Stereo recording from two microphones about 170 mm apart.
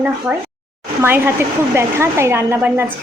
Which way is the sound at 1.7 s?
15° right (ahead or behind).